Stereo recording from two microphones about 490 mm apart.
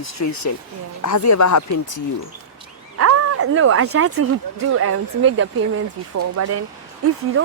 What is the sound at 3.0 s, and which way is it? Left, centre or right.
Speech, right.